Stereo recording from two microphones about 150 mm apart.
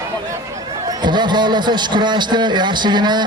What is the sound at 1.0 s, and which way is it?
A man's voice, 30° right (ahead or behind).